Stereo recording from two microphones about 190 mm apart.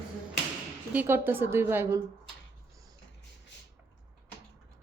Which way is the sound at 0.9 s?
10° right (ahead or behind).